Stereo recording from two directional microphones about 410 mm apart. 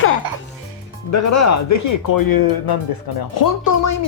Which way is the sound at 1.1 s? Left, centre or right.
Left.